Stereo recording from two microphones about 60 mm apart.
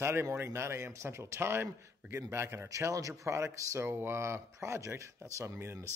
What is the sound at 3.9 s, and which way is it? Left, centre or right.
Speech, right.